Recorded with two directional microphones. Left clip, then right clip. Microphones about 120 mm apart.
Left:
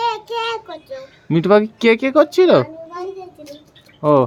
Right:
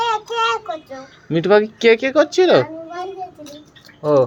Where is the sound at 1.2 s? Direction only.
75° left (ahead or behind).